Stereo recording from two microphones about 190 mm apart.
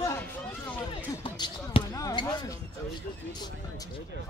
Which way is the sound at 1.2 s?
25° left (ahead or behind).